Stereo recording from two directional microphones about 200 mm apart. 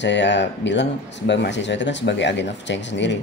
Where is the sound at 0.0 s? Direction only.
60° left (ahead or behind).